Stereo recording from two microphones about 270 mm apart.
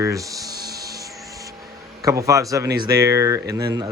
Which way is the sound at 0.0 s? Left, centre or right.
Centre.